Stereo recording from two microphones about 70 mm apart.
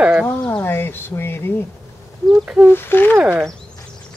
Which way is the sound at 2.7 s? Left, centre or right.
Left.